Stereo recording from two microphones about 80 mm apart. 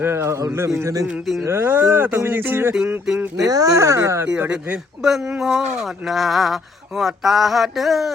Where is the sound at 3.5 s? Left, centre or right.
Right.